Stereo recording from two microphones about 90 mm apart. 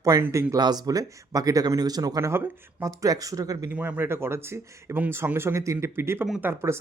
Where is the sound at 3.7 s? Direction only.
20° right (ahead or behind).